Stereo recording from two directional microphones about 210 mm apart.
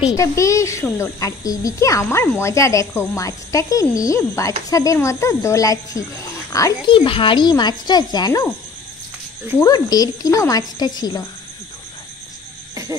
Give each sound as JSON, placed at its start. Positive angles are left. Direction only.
{"t": 0.1, "sound": "a child's voice", "side_deg": 15}
{"t": 9.6, "sound": "speech", "side_deg": 20}